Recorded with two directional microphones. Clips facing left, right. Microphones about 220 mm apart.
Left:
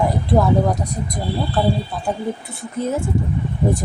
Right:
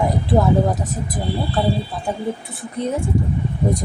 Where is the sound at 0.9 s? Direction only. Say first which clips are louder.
Even; 5° right (ahead or behind).